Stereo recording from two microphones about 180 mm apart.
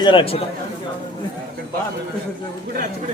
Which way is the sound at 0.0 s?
25° left (ahead or behind).